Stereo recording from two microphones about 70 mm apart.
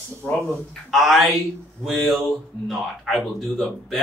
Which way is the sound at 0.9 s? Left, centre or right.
Centre.